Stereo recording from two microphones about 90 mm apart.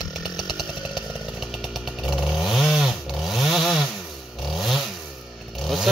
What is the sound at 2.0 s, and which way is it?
Chainsaw, centre (ahead or behind).